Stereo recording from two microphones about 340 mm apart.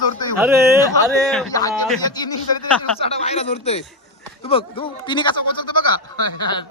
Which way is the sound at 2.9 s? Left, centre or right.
Centre.